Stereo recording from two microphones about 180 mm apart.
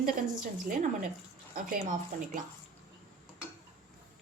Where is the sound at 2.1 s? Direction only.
45° right (ahead or behind).